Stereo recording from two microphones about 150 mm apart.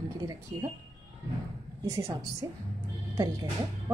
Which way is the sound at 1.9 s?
20° right (ahead or behind).